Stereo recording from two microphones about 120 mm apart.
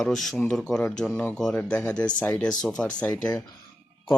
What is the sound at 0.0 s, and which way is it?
Speech, 5° left (ahead or behind).